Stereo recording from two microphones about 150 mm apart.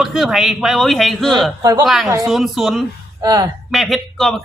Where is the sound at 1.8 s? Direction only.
Centre (ahead or behind).